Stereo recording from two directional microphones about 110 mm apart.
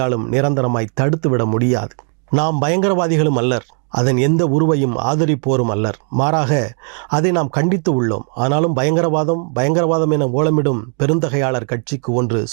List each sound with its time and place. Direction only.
0.0 s speech: 15° right (ahead or behind)